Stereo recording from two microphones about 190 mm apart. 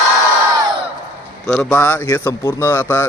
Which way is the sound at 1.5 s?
5° left (ahead or behind).